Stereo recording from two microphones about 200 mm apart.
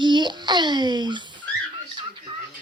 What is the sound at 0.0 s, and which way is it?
A child's voice, 20° right (ahead or behind).